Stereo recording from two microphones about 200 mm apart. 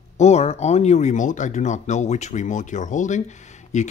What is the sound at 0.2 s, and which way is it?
Speech, 30° left (ahead or behind).